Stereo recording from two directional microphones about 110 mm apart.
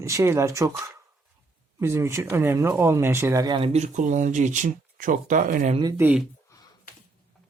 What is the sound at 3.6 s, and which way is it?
Speech, 85° right.